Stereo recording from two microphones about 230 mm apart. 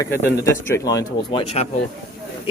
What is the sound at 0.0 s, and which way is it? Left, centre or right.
A man's voice, centre.